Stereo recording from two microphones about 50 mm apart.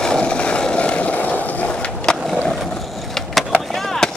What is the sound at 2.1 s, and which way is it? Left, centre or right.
Skateboard, centre.